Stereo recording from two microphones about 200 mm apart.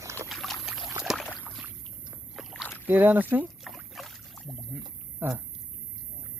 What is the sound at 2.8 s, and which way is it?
Rowboat, 10° right (ahead or behind).